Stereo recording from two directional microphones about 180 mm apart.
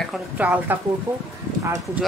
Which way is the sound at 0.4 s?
10° right (ahead or behind).